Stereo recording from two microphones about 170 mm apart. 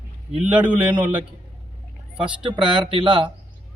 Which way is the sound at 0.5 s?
10° right (ahead or behind).